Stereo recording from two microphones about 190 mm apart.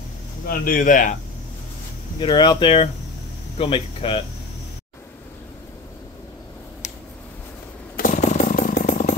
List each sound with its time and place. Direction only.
0.5 s speech: 45° left (ahead or behind)
2.1 s speech: 25° left (ahead or behind)
7.9 s motorcycle: 45° left (ahead or behind)